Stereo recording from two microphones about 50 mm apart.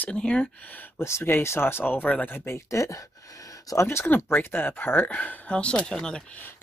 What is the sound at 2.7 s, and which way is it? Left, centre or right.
Speech, left.